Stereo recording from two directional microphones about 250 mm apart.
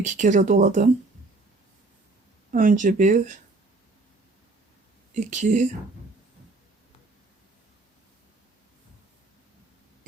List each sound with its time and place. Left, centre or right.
0.0 s speech: right
2.5 s speech: right
5.1 s speech: right